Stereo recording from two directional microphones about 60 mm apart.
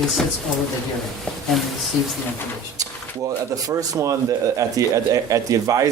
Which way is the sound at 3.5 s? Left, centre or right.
Right.